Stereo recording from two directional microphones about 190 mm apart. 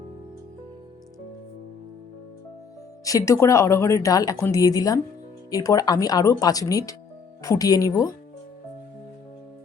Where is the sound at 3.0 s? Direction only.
20° left (ahead or behind).